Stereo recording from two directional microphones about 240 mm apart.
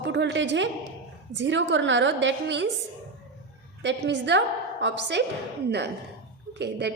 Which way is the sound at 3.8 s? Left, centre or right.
Right.